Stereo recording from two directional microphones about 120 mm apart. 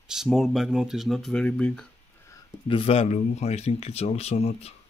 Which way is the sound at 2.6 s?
50° left (ahead or behind).